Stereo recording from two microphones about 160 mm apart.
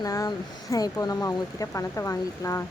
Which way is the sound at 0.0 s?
20° left (ahead or behind).